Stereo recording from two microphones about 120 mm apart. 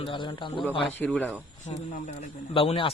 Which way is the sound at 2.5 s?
50° left (ahead or behind).